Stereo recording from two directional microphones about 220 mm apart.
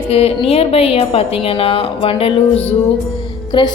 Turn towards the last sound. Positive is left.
turn(degrees=20)  # may be behind; listen again after turning